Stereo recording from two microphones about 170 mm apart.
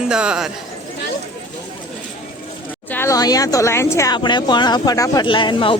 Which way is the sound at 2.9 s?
15° left (ahead or behind).